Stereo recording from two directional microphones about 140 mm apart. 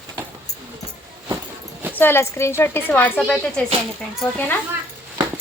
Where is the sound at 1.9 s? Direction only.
15° left (ahead or behind).